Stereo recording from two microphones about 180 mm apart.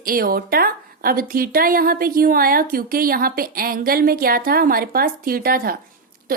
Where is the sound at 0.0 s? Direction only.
55° right (ahead or behind).